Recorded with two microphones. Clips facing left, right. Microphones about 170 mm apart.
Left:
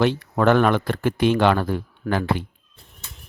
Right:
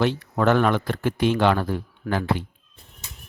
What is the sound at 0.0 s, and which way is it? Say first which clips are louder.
Speech: left 2 dB; 65° left (ahead or behind).